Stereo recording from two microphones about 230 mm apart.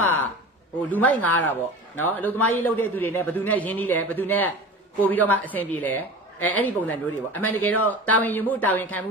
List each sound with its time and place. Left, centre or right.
0.8 s a woman's voice: centre